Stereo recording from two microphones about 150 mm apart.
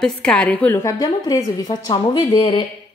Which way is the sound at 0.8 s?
20° left (ahead or behind).